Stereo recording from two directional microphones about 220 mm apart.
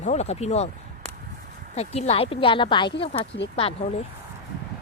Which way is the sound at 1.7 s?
30° left (ahead or behind).